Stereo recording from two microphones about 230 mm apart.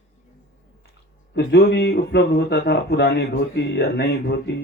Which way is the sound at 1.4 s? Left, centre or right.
Left.